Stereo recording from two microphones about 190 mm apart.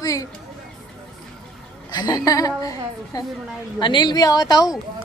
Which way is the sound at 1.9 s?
20° left (ahead or behind).